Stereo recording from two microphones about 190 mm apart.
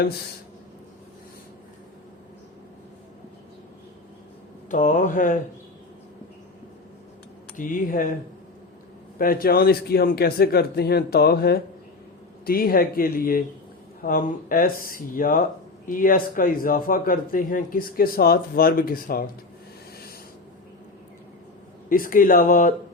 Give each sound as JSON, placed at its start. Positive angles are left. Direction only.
{"t": 4.7, "sound": "a man's voice", "side_deg": 40}
{"t": 7.5, "sound": "a man's voice", "side_deg": 45}
{"t": 9.1, "sound": "a man's voice", "side_deg": 50}
{"t": 21.8, "sound": "a man's voice", "side_deg": 45}